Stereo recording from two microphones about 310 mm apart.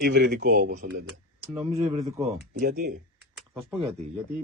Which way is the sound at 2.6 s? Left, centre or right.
Right.